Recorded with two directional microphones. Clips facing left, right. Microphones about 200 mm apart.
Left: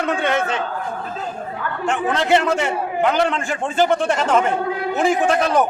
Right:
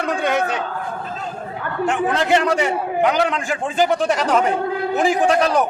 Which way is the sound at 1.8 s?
Centre (ahead or behind).